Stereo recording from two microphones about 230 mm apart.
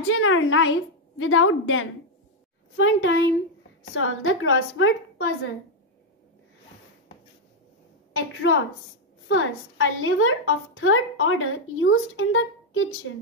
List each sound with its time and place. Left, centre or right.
0.0 s a woman's voice: left
8.1 s a woman's voice: left